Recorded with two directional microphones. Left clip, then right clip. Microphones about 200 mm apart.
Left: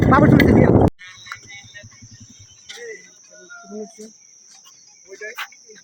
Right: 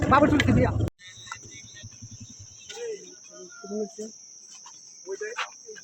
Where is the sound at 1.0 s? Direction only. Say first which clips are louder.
Left 5 dB; 20° left (ahead or behind).